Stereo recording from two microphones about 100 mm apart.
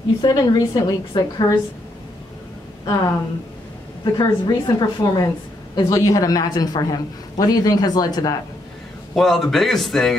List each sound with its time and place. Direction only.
0.2 s a woman's voice: 40° left (ahead or behind)
2.8 s a woman's voice: 40° left (ahead or behind)
9.1 s a man's voice: 5° left (ahead or behind)